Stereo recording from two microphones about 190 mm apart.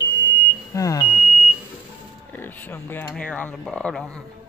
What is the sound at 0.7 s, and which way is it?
Speech, 20° left (ahead or behind).